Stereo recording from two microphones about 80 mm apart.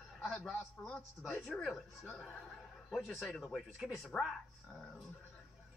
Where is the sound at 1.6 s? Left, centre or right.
Centre.